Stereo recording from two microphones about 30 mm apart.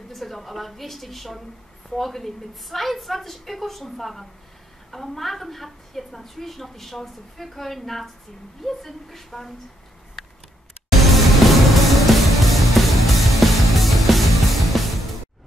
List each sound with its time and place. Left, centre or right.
0.1 s a woman's voice: centre
10.9 s music: centre